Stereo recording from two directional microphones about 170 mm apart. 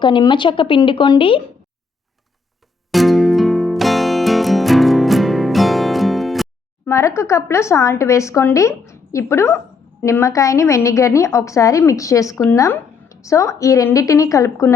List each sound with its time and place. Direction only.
0.0 s speech: 30° left (ahead or behind)
2.9 s music: centre (ahead or behind)
6.8 s speech: 15° left (ahead or behind)